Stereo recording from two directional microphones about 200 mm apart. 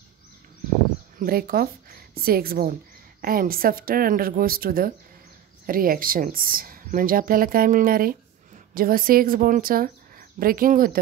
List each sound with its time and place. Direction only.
1.2 s a woman's voice: 45° right (ahead or behind)